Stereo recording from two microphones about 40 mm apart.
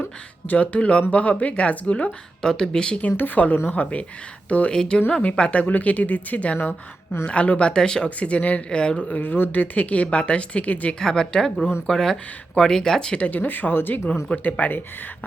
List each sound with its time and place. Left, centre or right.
0.0 s speech: left
2.4 s speech: centre
3.2 s speech: left
3.7 s speech: left
4.7 s speech: left
5.2 s speech: left
7.6 s speech: centre
8.2 s speech: left
9.0 s speech: left
9.2 s speech: left
11.0 s speech: centre
13.2 s speech: left
14.1 s speech: left